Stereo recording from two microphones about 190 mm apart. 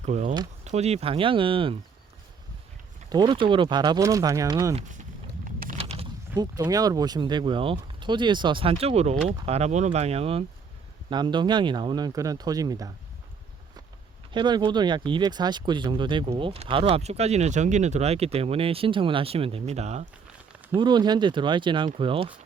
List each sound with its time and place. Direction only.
0.0 s speech: 40° right (ahead or behind)
3.1 s speech: 25° right (ahead or behind)
5.5 s a sound: 45° right (ahead or behind)
5.7 s a sound: 30° right (ahead or behind)
6.3 s speech: 20° right (ahead or behind)
14.3 s speech: 25° right (ahead or behind)
20.7 s speech: 20° right (ahead or behind)